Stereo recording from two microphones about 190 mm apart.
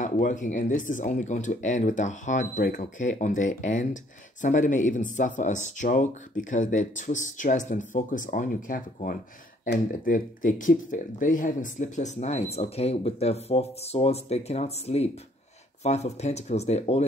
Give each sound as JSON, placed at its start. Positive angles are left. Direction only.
{"t": 0.0, "sound": "speech", "side_deg": 45}